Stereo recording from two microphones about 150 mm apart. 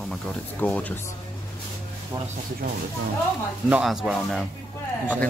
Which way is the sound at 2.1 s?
15° right (ahead or behind).